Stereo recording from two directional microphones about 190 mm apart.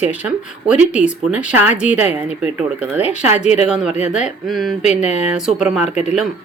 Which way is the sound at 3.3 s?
35° left (ahead or behind).